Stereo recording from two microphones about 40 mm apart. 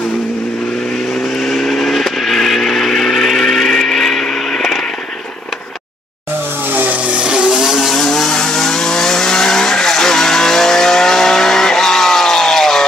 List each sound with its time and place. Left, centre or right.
1.6 s vehicle: centre
6.7 s vehicle: right
7.2 s vehicle: right; by 7.9 s centre
7.9 s vehicle: centre